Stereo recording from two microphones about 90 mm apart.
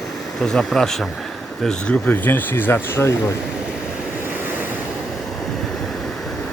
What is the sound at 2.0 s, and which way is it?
Speech, 20° left (ahead or behind).